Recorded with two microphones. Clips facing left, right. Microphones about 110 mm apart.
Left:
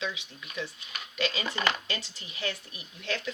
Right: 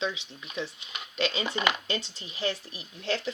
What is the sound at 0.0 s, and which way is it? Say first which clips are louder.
Speech: right 3 dB; 25° right (ahead or behind).